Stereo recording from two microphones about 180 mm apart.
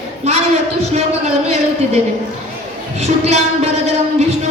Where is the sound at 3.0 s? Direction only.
35° right (ahead or behind).